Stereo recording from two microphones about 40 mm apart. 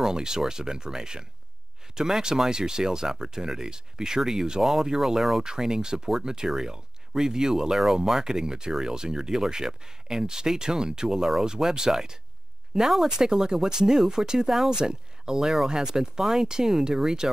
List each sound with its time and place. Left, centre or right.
0.0 s speech: centre
5.4 s speech: centre
13.3 s speech: centre